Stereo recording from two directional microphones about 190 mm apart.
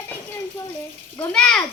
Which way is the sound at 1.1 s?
5° left (ahead or behind).